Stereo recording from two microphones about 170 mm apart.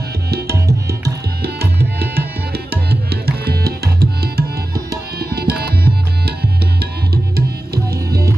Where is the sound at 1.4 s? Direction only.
65° right (ahead or behind).